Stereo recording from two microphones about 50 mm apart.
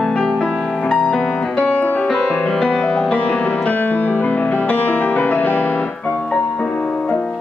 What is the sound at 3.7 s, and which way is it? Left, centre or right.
Music, left.